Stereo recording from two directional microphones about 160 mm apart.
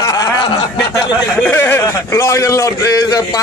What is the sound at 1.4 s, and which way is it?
Speech, 15° left (ahead or behind).